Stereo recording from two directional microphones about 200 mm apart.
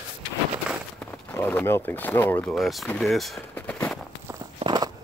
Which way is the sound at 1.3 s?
10° left (ahead or behind).